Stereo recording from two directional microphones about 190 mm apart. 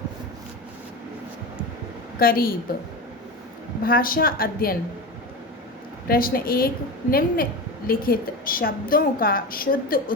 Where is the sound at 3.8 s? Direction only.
50° left (ahead or behind).